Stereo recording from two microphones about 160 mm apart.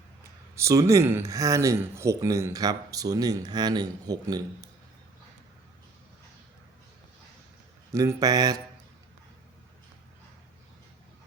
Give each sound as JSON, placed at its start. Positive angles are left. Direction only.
{"t": 0.5, "sound": "speech", "side_deg": -20}
{"t": 7.9, "sound": "speech", "side_deg": -20}